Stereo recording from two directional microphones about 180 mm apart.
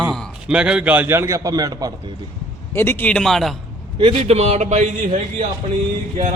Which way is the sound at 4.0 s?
30° right (ahead or behind).